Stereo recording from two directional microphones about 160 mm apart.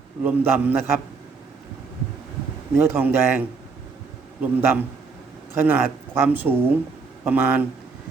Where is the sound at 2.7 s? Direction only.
15° right (ahead or behind).